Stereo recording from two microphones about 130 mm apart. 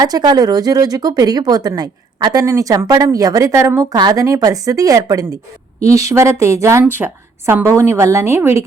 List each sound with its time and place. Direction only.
0.0 s speech: 30° right (ahead or behind)